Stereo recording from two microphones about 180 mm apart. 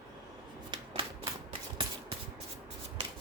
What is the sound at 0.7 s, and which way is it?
Typewriter, 25° right (ahead or behind).